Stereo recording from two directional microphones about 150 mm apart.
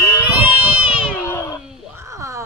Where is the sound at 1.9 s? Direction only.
20° right (ahead or behind).